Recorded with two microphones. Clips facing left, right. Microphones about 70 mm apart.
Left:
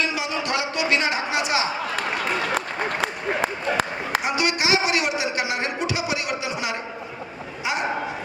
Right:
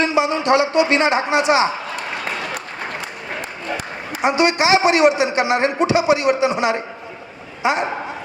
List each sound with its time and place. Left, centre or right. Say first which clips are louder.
0.0 s a man's voice: right 8 dB; right
3.0 s a sound: left 5 dB; left
4.2 s a man's voice: right 11 dB; right